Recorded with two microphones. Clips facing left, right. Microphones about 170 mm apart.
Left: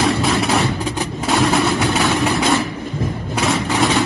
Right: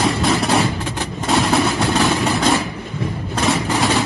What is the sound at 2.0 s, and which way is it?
Vehicle, centre (ahead or behind).